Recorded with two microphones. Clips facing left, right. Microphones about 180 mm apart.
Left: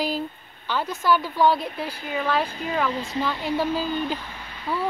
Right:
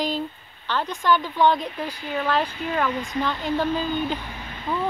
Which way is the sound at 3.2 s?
10° left (ahead or behind).